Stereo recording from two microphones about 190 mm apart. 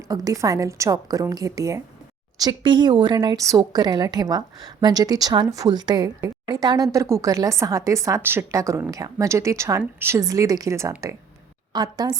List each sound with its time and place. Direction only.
0.1 s a woman's voice: 20° right (ahead or behind)